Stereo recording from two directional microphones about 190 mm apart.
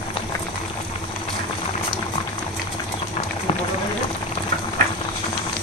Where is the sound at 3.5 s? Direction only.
30° left (ahead or behind).